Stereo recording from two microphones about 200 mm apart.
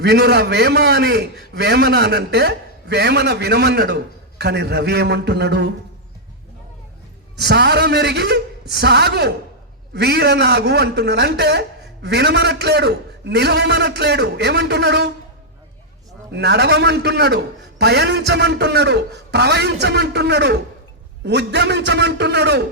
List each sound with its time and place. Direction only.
0.0 s a man's voice: 55° right (ahead or behind)
7.3 s a man's voice: 55° right (ahead or behind)
16.3 s a man's voice: 55° right (ahead or behind)